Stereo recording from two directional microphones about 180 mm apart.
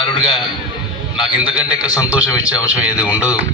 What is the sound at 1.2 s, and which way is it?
A man's voice, 5° right (ahead or behind).